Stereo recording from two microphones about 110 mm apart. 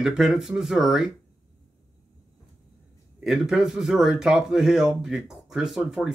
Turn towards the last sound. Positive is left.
turn(degrees=-5)  # may be behind; listen again after turning